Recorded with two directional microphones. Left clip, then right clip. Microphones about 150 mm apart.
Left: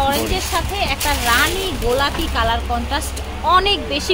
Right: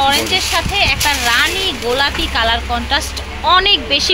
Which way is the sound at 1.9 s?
5° right (ahead or behind).